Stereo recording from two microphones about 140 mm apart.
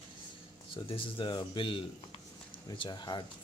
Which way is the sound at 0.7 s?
40° left (ahead or behind).